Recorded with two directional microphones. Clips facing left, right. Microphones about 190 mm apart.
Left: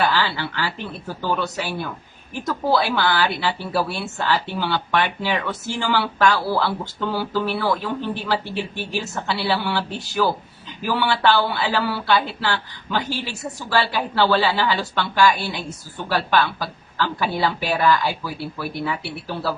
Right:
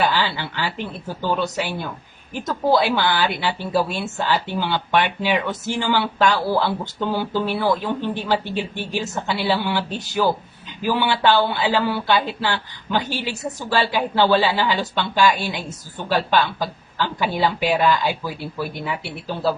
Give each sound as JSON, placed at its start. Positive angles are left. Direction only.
{"t": 0.0, "sound": "a woman's voice", "side_deg": -20}
{"t": 2.8, "sound": "a woman's voice", "side_deg": -20}